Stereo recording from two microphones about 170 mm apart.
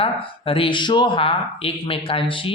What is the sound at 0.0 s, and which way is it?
Speech, 30° left (ahead or behind).